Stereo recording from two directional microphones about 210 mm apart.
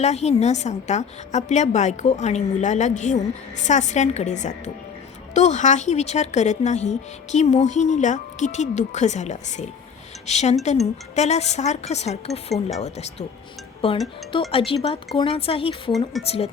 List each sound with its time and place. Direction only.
0.0 s a woman's voice: 30° left (ahead or behind)